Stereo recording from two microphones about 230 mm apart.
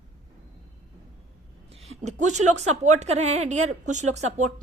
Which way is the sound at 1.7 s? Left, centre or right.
Right.